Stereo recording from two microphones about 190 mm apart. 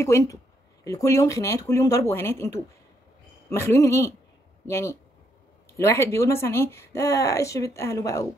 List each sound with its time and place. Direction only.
0.0 s speech: 15° left (ahead or behind)